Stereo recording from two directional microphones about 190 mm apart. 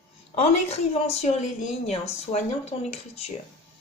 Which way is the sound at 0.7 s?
35° left (ahead or behind).